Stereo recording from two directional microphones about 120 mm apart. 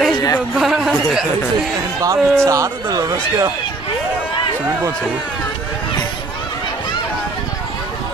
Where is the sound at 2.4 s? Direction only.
25° right (ahead or behind).